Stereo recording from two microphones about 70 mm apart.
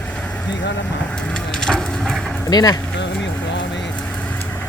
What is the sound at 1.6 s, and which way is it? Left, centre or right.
Crushing, centre.